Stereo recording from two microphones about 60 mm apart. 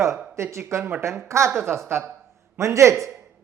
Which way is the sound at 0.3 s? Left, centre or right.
Right.